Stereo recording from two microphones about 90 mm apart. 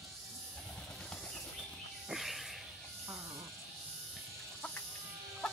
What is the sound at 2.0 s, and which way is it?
Insect, centre (ahead or behind).